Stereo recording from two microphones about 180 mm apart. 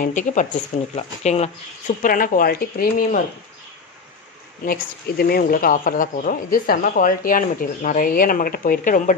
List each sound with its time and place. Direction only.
0.0 s speech: 45° left (ahead or behind)
2.0 s speech: 50° left (ahead or behind)
4.6 s speech: 55° left (ahead or behind)